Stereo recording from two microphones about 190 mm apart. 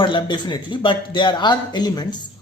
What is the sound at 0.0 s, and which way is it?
Speech, 25° left (ahead or behind).